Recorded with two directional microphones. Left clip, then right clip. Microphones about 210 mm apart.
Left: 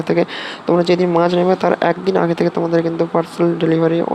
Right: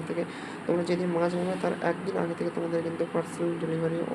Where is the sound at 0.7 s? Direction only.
40° left (ahead or behind).